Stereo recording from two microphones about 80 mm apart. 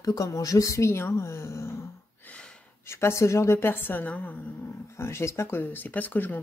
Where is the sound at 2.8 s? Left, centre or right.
Left.